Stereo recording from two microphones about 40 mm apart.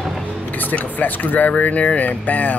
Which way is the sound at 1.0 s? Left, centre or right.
Left.